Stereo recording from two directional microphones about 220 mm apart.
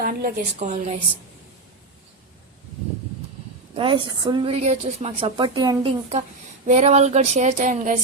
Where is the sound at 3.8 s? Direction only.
25° right (ahead or behind).